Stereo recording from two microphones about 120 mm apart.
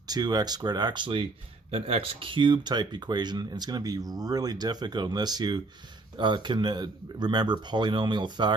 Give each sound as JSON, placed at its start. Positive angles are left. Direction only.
{"t": 0.1, "sound": "speech", "side_deg": -35}